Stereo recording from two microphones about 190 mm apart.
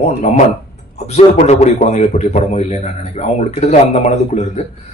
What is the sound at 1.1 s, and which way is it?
A man's voice, 35° left (ahead or behind).